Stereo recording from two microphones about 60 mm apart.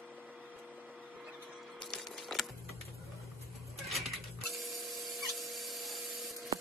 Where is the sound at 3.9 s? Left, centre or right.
Centre.